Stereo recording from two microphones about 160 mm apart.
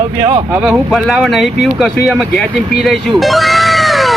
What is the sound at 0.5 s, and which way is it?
Speech, 5° right (ahead or behind).